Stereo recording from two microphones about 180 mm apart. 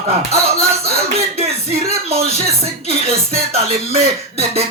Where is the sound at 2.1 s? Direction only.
35° right (ahead or behind).